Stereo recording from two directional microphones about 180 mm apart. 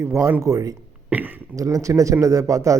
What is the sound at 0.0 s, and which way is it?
A man's voice, 15° right (ahead or behind).